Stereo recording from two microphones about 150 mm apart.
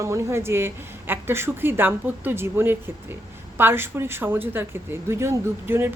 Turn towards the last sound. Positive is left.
turn(degrees=-15)  # may be behind; listen again after turning